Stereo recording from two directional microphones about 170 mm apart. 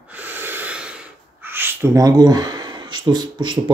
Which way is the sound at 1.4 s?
10° right (ahead or behind).